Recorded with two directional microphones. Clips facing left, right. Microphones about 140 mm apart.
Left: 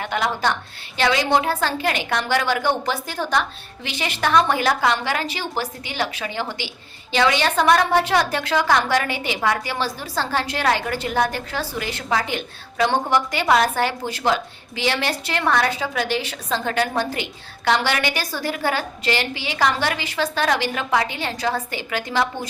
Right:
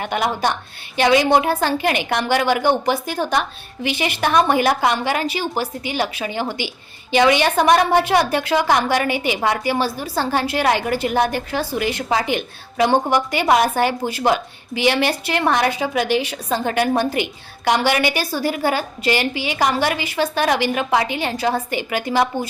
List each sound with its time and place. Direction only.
0.0 s a woman's voice: 15° right (ahead or behind)